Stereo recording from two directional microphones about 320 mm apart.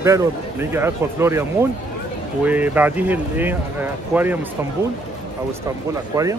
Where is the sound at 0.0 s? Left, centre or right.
Centre.